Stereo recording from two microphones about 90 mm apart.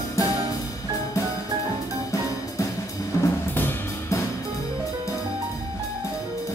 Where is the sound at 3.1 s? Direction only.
30° left (ahead or behind).